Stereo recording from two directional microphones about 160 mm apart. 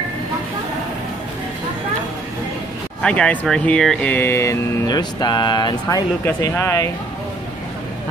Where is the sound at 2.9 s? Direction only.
5° left (ahead or behind).